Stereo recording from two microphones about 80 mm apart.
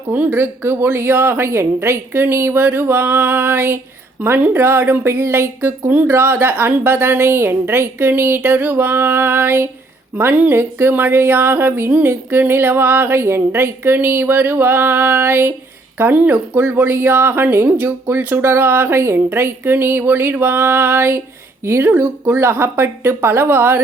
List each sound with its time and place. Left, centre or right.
0.1 s speech: right